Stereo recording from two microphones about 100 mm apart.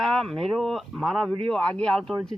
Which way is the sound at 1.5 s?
10° left (ahead or behind).